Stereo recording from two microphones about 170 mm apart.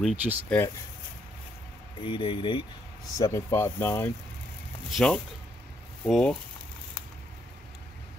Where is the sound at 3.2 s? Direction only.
15° left (ahead or behind).